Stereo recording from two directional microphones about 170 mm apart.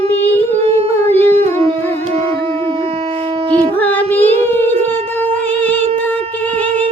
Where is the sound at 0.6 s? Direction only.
35° right (ahead or behind).